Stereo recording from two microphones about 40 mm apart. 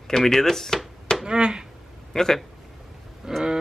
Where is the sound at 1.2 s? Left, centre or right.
Centre.